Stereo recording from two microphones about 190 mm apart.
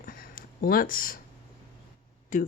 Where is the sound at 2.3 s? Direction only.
40° left (ahead or behind).